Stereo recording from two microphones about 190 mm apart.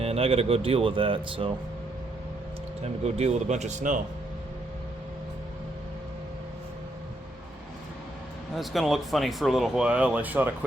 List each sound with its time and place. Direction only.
0.0 s speech: 30° right (ahead or behind)
2.8 s speech: 35° right (ahead or behind)
8.5 s speech: centre (ahead or behind)